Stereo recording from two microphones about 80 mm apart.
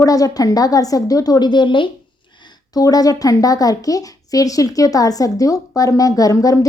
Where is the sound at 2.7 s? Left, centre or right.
Left.